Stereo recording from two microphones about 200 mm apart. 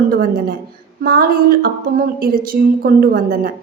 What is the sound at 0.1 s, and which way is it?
A woman's voice, 50° right (ahead or behind).